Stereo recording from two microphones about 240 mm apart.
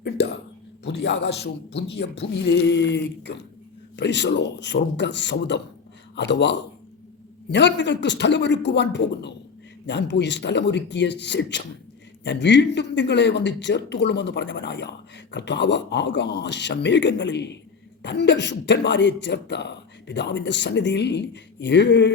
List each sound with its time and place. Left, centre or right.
0.9 s speech: left